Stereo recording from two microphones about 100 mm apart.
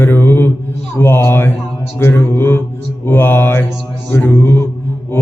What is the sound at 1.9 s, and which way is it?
Mantra, 25° left (ahead or behind).